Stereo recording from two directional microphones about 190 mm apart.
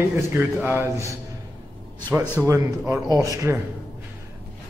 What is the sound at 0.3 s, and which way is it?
Speech, 10° right (ahead or behind).